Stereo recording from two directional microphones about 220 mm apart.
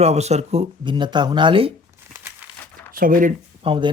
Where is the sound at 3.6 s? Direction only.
20° right (ahead or behind).